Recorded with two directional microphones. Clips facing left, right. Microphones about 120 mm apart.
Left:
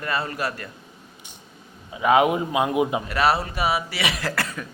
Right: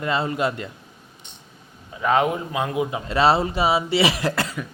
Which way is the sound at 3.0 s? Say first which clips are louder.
Right 3 dB; 25° right (ahead or behind).